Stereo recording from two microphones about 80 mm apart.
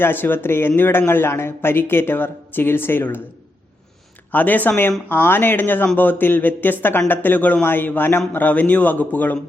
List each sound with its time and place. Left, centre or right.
0.0 s speech: left
4.3 s speech: left